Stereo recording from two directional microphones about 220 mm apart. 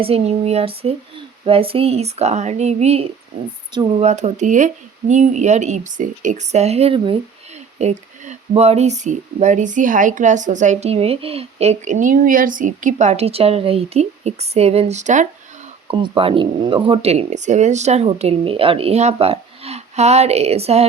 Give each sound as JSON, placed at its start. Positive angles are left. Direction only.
{"t": 0.0, "sound": "speech", "side_deg": -25}
{"t": 4.1, "sound": "speech", "side_deg": -30}